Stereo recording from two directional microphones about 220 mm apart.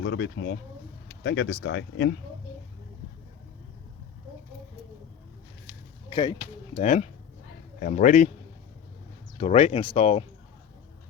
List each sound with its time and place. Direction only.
0.0 s speech: 55° left (ahead or behind)
6.1 s speech: 20° left (ahead or behind)
9.4 s speech: 30° left (ahead or behind)